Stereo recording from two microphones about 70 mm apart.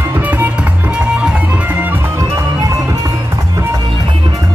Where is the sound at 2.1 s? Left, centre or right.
Right.